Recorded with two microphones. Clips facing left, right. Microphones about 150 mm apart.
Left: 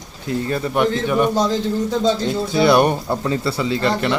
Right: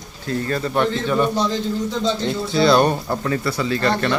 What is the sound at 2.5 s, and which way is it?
A man's voice, 20° left (ahead or behind).